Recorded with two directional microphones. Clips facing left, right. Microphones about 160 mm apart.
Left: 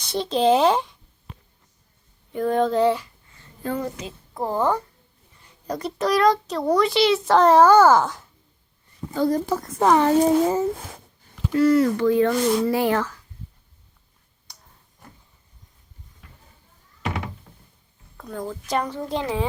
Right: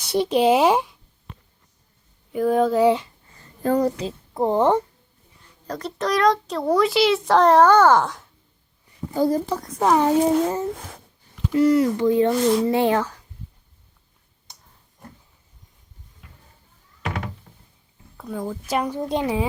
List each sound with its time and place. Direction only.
0.0 s speech: 10° right (ahead or behind)
2.3 s a child's voice: 5° right (ahead or behind)
3.3 s a sound: 40° right (ahead or behind)
4.4 s speech: 20° right (ahead or behind)
5.6 s a child's voice: 10° left (ahead or behind)
9.0 s a child's voice: 10° right (ahead or behind)
9.5 s a child's voice: 5° left (ahead or behind)
10.2 s a child's voice: 5° left (ahead or behind)
11.5 s speech: 20° right (ahead or behind)
12.3 s a child's voice: centre (ahead or behind)
12.6 s speech: 20° right (ahead or behind)
14.5 s a sound: 20° right (ahead or behind)
18.2 s a woman's voice: 10° right (ahead or behind)
18.9 s a woman's voice: 20° right (ahead or behind)